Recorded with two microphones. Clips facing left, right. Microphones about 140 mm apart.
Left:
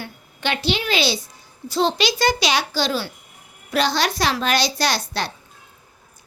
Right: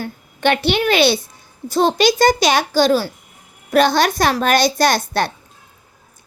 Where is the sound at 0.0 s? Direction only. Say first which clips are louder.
Right 8 dB; 55° right (ahead or behind).